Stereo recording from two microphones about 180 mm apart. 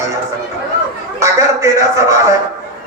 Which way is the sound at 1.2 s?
15° right (ahead or behind).